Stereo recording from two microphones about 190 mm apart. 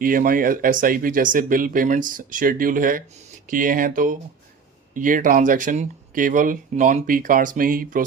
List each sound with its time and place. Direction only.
0.0 s speech: 50° right (ahead or behind)